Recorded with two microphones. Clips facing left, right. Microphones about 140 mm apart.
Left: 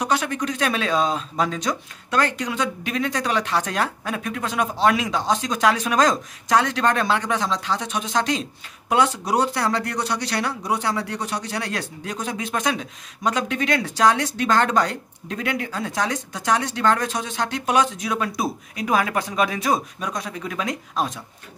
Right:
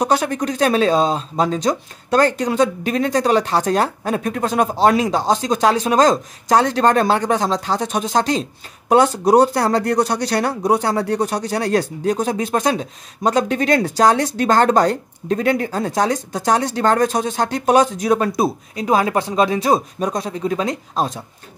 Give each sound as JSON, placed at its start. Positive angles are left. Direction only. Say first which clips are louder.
{"t": 0.0, "sound": "speech", "louder": "right 5 dB", "side_deg": -35}